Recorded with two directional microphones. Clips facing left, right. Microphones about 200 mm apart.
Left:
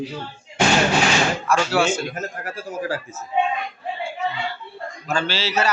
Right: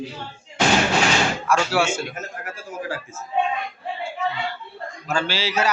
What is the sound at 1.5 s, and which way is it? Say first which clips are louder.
Speech: left 1 dB; 10° right (ahead or behind).